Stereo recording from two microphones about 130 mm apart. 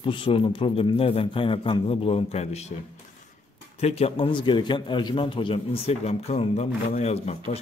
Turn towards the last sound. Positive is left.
turn(degrees=55)  # may be behind; listen again after turning